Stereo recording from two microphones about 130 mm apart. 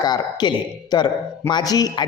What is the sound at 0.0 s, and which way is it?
A man's voice, 30° left (ahead or behind).